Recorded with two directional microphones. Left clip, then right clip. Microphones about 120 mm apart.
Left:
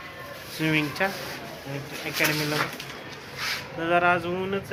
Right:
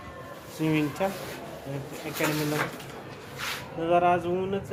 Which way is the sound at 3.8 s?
15° right (ahead or behind).